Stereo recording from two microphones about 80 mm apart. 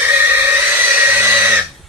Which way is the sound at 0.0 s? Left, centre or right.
Right.